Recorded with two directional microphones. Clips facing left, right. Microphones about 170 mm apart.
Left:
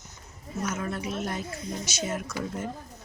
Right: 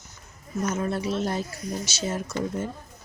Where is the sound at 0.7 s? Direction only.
30° right (ahead or behind).